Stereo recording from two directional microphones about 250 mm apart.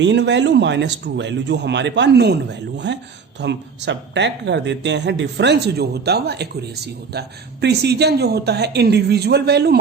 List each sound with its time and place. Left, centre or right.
0.0 s speech: right